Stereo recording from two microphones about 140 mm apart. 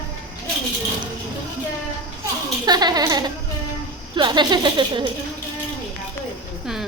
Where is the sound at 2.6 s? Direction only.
30° right (ahead or behind).